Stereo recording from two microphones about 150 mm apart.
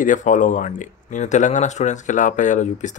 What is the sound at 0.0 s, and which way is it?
Speech, 60° left (ahead or behind).